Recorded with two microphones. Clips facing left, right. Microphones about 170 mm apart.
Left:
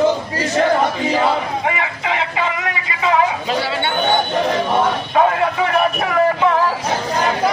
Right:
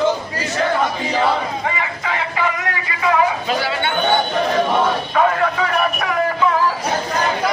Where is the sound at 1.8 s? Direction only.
20° left (ahead or behind).